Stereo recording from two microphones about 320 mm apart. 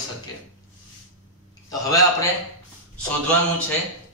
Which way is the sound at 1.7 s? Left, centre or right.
Centre.